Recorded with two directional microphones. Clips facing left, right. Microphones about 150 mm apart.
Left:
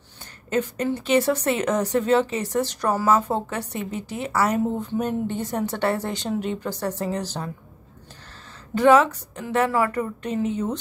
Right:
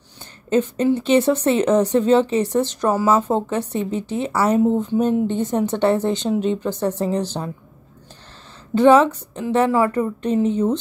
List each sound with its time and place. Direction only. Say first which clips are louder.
0.5 s speech: right 6 dB; 25° right (ahead or behind)
8.7 s speech: right 3 dB; 25° right (ahead or behind)